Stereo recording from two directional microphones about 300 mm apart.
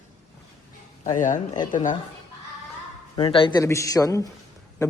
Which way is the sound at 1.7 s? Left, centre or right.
Left.